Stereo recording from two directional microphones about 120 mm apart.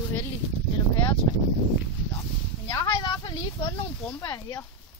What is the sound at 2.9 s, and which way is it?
Speech, 40° left (ahead or behind).